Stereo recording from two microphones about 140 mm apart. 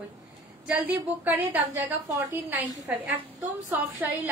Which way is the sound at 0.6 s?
10° right (ahead or behind).